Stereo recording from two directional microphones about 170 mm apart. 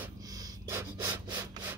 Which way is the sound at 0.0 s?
15° right (ahead or behind).